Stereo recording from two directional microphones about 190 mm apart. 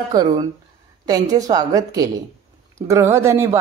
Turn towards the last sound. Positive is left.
turn(degrees=-15)  # may be behind; listen again after turning